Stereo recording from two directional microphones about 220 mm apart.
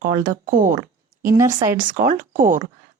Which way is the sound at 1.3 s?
15° right (ahead or behind).